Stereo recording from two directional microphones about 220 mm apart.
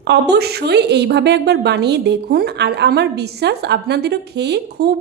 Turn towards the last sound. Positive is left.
turn(degrees=-50)  # may be behind; listen again after turning